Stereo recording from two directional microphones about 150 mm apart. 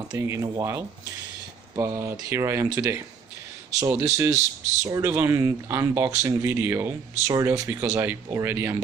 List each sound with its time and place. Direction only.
0.1 s speech: 20° right (ahead or behind)